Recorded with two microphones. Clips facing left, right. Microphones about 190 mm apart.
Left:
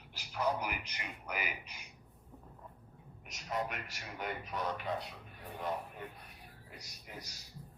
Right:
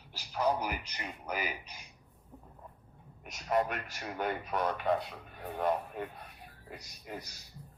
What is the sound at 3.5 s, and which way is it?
Speech, 55° right (ahead or behind).